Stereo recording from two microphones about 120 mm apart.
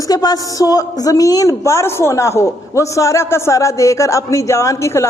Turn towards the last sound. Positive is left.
turn(degrees=25)  # may be behind; listen again after turning